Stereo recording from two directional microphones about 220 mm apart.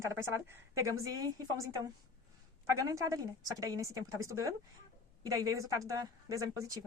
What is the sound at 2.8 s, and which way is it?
Speech, 15° right (ahead or behind).